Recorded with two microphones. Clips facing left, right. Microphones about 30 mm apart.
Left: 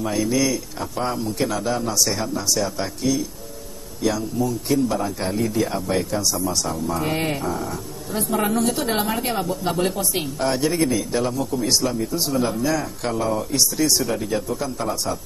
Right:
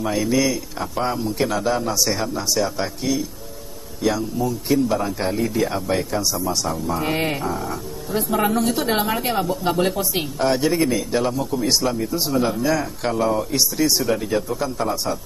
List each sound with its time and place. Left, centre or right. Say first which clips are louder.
0.0 s speech: right 1 dB; centre